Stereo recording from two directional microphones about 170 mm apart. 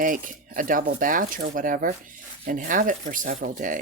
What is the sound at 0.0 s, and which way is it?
Speech, 50° right (ahead or behind).